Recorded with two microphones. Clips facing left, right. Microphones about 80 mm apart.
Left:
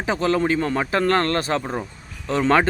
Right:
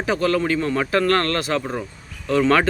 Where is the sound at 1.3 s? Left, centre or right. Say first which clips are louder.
Even; left.